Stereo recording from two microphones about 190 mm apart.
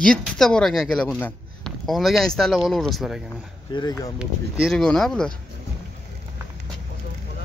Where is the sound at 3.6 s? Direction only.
20° left (ahead or behind).